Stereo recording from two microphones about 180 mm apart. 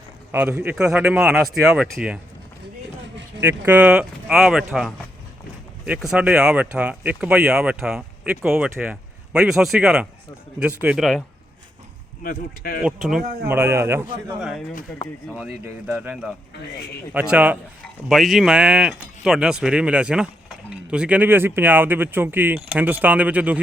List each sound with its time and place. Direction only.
0.3 s speech: 10° right (ahead or behind)
3.7 s speech: 5° right (ahead or behind)
12.2 s speech: 55° left (ahead or behind)
12.8 s speech: centre (ahead or behind)
13.2 s speech: 55° right (ahead or behind)
13.5 s speech: 15° right (ahead or behind)
14.9 s speech: 10° left (ahead or behind)
15.4 s speech: 5° right (ahead or behind)